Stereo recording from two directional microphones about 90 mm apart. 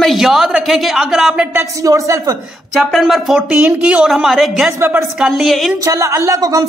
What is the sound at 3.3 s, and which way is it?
A man's voice, 10° right (ahead or behind).